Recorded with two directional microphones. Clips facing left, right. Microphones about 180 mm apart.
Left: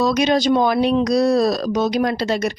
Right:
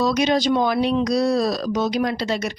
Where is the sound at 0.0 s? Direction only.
50° left (ahead or behind).